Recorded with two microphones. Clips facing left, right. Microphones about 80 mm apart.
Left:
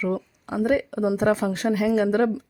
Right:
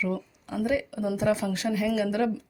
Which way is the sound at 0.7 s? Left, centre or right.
Left.